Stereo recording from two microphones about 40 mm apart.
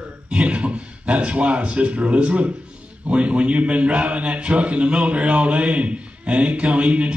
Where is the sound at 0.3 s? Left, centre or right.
Right.